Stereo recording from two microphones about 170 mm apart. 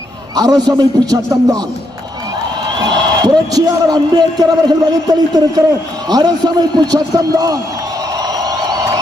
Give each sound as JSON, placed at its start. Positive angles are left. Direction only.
{"t": 0.3, "sound": "speech", "side_deg": -20}
{"t": 2.7, "sound": "speech", "side_deg": -25}
{"t": 8.2, "sound": "a sound", "side_deg": -20}